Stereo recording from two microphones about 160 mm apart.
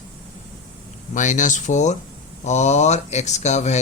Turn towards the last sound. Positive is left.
turn(degrees=45)  # may be behind; listen again after turning